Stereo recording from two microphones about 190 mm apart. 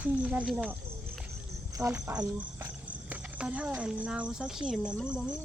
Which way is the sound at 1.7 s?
15° right (ahead or behind).